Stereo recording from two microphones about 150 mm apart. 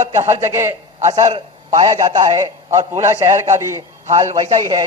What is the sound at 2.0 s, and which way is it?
A man's voice, 25° right (ahead or behind).